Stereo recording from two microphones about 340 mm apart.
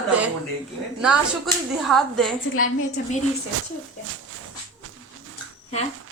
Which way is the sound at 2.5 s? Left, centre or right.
Left.